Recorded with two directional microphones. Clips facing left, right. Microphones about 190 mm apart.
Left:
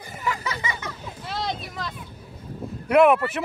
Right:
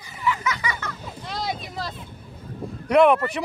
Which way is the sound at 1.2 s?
5° left (ahead or behind).